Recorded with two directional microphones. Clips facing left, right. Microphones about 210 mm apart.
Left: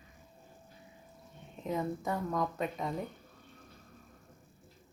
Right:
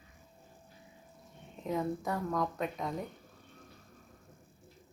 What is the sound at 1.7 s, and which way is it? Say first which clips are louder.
A woman's voice: even; centre (ahead or behind).